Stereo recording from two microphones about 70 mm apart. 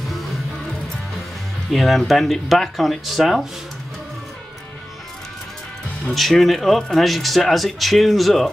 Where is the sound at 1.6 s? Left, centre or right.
Centre.